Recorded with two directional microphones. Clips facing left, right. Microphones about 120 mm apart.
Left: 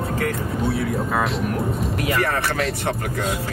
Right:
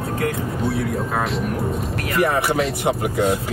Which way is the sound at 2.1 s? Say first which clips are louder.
Right 6 dB; 15° right (ahead or behind).